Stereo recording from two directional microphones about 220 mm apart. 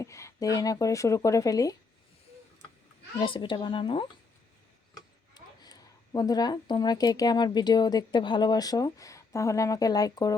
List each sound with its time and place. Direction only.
0.0 s speech: 15° left (ahead or behind)
3.2 s a woman's voice: 20° left (ahead or behind)
4.9 s a sound: 15° left (ahead or behind)
6.1 s a woman's voice: 15° left (ahead or behind)